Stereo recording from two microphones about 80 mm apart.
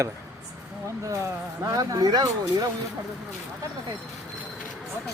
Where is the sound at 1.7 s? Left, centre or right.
Right.